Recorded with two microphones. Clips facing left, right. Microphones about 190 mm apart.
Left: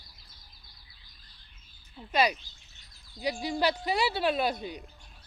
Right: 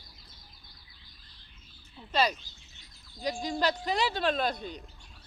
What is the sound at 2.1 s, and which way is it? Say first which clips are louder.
Speech: left 1 dB; 10° left (ahead or behind).